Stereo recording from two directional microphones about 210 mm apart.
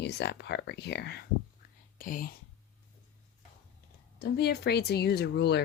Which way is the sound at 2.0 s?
40° left (ahead or behind).